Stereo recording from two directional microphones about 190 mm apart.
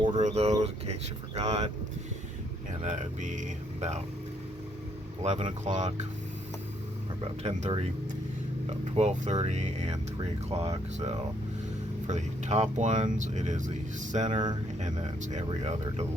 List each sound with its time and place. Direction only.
0.2 s a sound: 35° right (ahead or behind)
1.4 s speech: 35° right (ahead or behind)
2.8 s speech: 40° right (ahead or behind)
5.2 s speech: 35° right (ahead or behind)
7.4 s speech: 35° right (ahead or behind)
14.3 s speech: 25° right (ahead or behind)
15.4 s speech: 35° right (ahead or behind)